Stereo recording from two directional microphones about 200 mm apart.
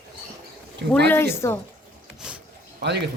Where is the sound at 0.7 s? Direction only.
55° right (ahead or behind).